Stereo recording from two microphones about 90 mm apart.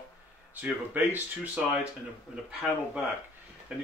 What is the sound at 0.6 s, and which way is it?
Speech, 20° right (ahead or behind).